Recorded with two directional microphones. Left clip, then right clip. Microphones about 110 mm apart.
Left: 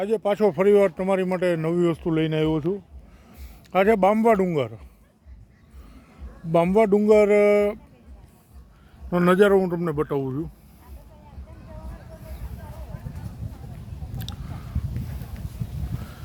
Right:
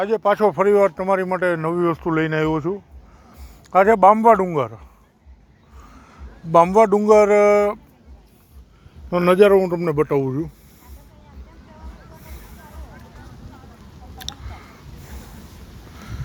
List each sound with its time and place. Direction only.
0.0 s a man's voice: 30° left (ahead or behind)
6.8 s a man's voice: 40° left (ahead or behind)
9.0 s a man's voice: 10° left (ahead or behind)
9.8 s a man's voice: 15° right (ahead or behind)
14.3 s a sound: 15° right (ahead or behind)